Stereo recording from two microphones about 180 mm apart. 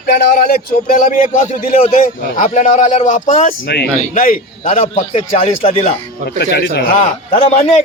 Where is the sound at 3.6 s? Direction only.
60° left (ahead or behind).